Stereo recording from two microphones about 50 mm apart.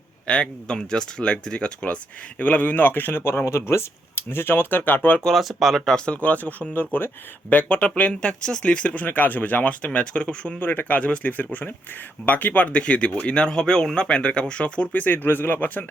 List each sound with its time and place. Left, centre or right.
0.3 s speech: centre
2.4 s speech: left
5.2 s speech: centre
6.1 s speech: left
10.6 s speech: left